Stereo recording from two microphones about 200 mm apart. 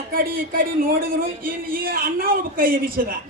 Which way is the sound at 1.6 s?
45° right (ahead or behind).